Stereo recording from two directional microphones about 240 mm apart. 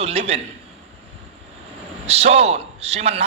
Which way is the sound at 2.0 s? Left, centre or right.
Right.